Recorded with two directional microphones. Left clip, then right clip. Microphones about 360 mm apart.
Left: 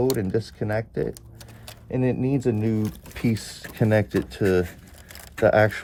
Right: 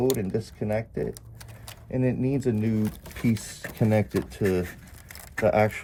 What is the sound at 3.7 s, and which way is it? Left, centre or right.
Speech, centre.